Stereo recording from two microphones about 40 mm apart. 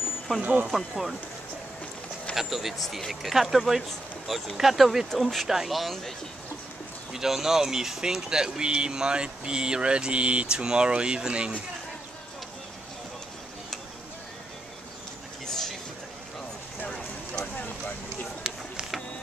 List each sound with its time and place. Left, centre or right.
0.4 s speech: right
0.7 s speech: centre
2.3 s speech: centre
7.1 s speech: centre
15.4 s a sound: centre